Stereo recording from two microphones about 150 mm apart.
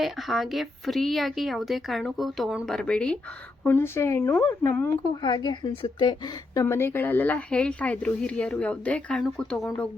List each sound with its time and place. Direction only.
0.0 s a woman's voice: centre (ahead or behind)
5.2 s a woman's voice: 30° left (ahead or behind); by 9.9 s 5° left (ahead or behind)